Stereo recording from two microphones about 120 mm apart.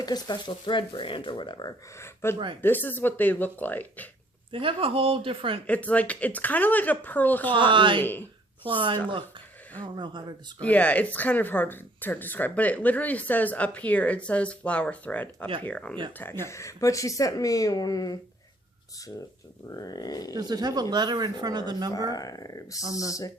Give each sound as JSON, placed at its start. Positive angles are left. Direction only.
{"t": 0.0, "sound": "speech", "side_deg": 35}
{"t": 2.0, "sound": "speech", "side_deg": 20}
{"t": 4.5, "sound": "speech", "side_deg": -50}
{"t": 5.6, "sound": "speech", "side_deg": 10}
{"t": 7.7, "sound": "speech", "side_deg": -45}
{"t": 10.6, "sound": "speech", "side_deg": 10}
{"t": 19.7, "sound": "speech", "side_deg": 35}
{"t": 20.3, "sound": "speech", "side_deg": -35}
{"t": 22.1, "sound": "speech", "side_deg": 30}